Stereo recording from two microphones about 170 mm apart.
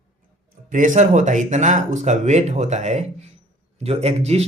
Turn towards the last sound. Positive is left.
turn(degrees=-40)  # may be behind; listen again after turning